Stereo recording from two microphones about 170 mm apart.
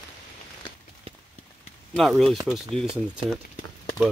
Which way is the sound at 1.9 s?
Centre (ahead or behind).